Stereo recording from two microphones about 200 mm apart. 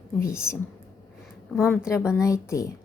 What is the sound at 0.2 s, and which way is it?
Speech, 15° left (ahead or behind).